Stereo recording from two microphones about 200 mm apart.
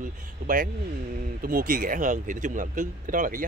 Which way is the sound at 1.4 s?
45° right (ahead or behind).